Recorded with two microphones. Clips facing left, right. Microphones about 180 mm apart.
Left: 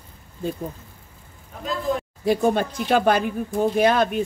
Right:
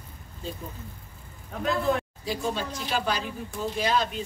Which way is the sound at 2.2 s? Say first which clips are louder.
Left 10 dB; 55° left (ahead or behind).